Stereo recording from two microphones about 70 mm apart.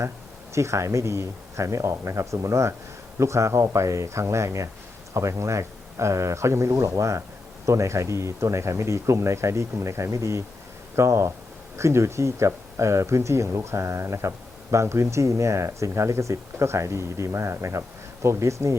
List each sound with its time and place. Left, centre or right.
0.5 s speech: right